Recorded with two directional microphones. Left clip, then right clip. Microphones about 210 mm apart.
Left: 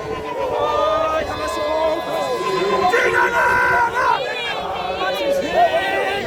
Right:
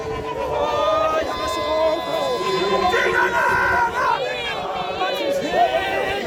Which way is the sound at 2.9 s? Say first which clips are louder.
Left 2 dB; 30° left (ahead or behind).